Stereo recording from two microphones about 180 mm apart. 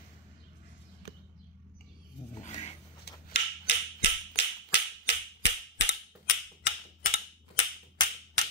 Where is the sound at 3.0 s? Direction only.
65° left (ahead or behind).